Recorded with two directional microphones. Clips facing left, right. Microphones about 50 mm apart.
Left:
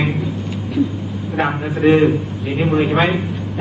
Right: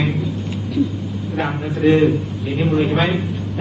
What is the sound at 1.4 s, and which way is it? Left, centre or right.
A man's voice, left.